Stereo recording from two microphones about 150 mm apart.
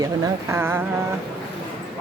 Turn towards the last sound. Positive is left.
turn(degrees=-15)  # may be behind; listen again after turning